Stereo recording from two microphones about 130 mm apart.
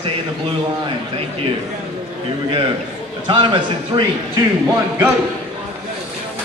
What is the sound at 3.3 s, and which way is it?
Speech, 40° right (ahead or behind).